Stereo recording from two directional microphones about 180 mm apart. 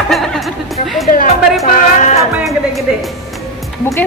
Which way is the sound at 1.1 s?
50° left (ahead or behind).